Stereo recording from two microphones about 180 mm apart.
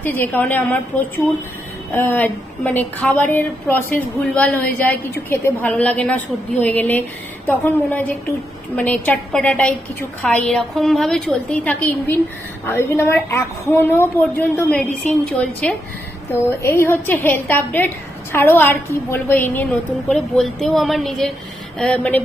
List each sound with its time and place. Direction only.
0.0 s a woman's voice: 10° left (ahead or behind)
1.9 s a woman's voice: 10° left (ahead or behind)